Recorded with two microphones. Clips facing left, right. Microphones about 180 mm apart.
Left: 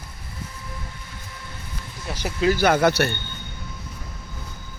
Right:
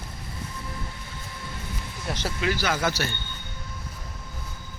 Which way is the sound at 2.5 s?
55° left (ahead or behind).